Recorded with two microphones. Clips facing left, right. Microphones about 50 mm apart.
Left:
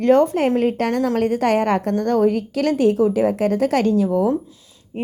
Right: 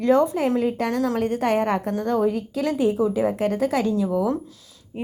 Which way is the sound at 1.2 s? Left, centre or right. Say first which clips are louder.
Left 4 dB; left.